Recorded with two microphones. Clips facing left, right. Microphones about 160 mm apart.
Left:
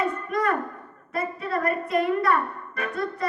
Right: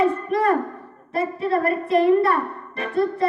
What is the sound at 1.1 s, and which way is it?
Speech, 30° right (ahead or behind).